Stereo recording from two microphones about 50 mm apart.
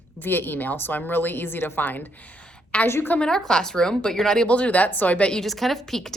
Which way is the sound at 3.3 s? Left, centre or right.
Centre.